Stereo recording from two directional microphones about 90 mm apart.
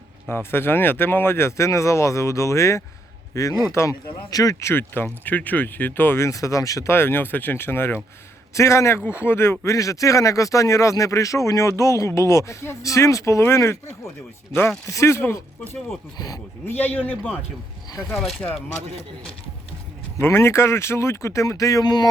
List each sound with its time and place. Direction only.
0.3 s speech: 25° left (ahead or behind); by 4.7 s 40° left (ahead or behind)
4.7 s speech: 20° left (ahead or behind); by 6.9 s 40° left (ahead or behind)
6.9 s speech: 25° left (ahead or behind)
14.8 s speech: 35° left (ahead or behind)
16.1 s speech: 45° left (ahead or behind)
16.7 s speech: 20° left (ahead or behind)
20.2 s speech: 30° left (ahead or behind); by 22.1 s 50° left (ahead or behind)